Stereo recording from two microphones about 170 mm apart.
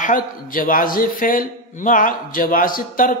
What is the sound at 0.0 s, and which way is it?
A man's voice, 50° left (ahead or behind).